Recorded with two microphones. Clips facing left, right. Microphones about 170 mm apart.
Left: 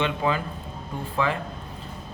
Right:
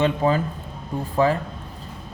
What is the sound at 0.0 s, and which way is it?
A man's voice, 40° right (ahead or behind).